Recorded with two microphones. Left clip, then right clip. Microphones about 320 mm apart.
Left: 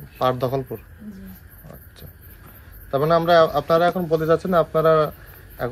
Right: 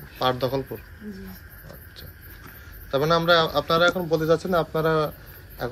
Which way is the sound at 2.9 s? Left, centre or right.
Left.